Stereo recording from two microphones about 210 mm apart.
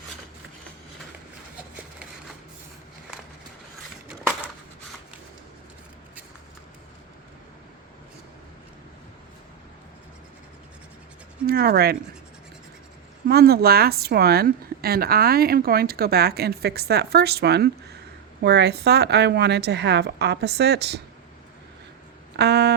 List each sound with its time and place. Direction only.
11.4 s speech: 45° right (ahead or behind)
13.2 s speech: 50° right (ahead or behind)
22.4 s a sound: 50° right (ahead or behind)